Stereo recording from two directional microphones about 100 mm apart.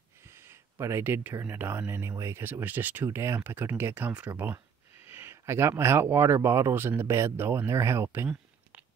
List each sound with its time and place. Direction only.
0.2 s speech: 25° right (ahead or behind)